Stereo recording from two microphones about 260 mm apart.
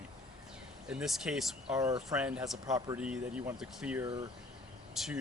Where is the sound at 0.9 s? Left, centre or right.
Centre.